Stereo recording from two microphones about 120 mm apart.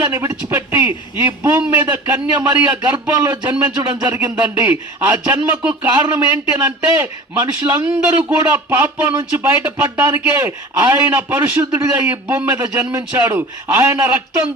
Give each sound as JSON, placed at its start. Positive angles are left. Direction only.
{"t": 0.0, "sound": "a man's voice", "side_deg": -25}